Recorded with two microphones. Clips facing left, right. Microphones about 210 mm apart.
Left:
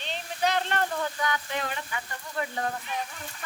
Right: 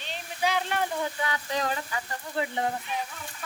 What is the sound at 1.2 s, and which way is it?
Frying, 30° right (ahead or behind).